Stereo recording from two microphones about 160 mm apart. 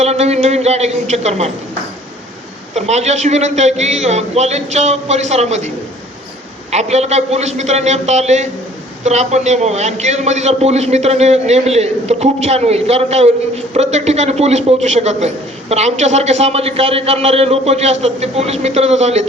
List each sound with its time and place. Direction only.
0.0 s a man's voice: 40° right (ahead or behind)
2.7 s a man's voice: 45° right (ahead or behind)